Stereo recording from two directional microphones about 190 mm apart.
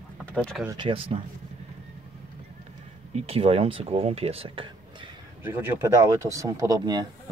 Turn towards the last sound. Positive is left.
turn(degrees=-20)  # may be behind; listen again after turning